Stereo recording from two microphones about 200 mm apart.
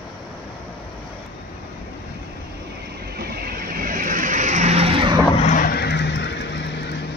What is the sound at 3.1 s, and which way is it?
Vehicle, 50° right (ahead or behind).